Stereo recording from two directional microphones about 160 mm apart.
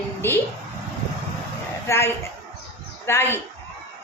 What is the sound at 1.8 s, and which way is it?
A woman's voice, 15° left (ahead or behind).